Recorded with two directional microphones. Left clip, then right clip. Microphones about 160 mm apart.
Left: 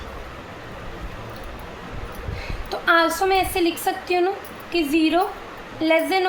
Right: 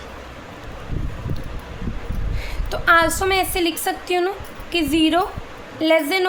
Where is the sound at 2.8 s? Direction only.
35° right (ahead or behind).